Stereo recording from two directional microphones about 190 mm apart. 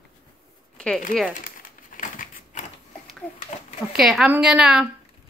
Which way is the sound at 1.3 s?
45° left (ahead or behind).